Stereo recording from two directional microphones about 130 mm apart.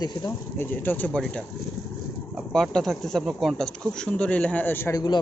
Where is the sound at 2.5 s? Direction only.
5° left (ahead or behind).